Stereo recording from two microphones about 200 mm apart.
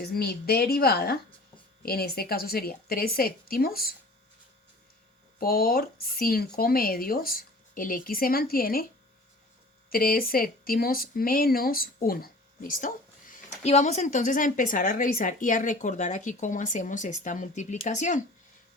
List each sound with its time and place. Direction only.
0.0 s speech: 50° left (ahead or behind)
5.4 s speech: 45° left (ahead or behind)
9.9 s speech: 45° left (ahead or behind)